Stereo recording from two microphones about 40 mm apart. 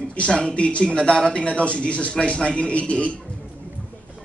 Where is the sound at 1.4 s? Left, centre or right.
Left.